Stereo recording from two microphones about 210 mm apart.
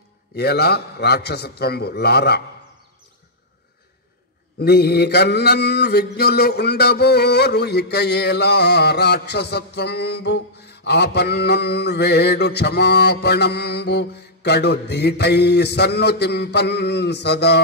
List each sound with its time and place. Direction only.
0.4 s mantra: 50° left (ahead or behind)
4.6 s mantra: 50° left (ahead or behind)